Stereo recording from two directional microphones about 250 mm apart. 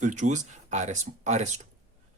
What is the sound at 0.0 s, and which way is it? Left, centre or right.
A man's voice, right.